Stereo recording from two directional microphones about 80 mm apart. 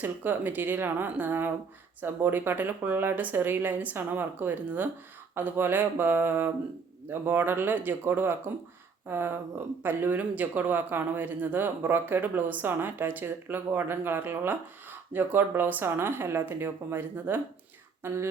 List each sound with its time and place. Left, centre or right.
0.0 s speech: right